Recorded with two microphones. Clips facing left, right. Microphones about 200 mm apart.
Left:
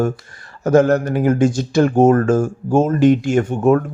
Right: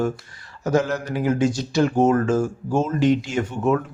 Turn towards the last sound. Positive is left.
turn(degrees=50)  # may be behind; listen again after turning